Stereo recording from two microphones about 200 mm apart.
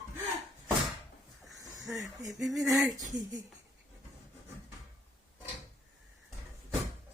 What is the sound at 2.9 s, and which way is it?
Speech, 20° right (ahead or behind).